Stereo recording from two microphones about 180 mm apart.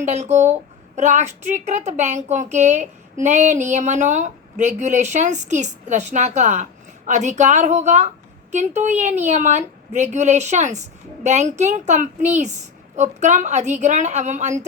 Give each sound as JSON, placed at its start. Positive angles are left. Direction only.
{"t": 0.0, "sound": "a woman's voice", "side_deg": -40}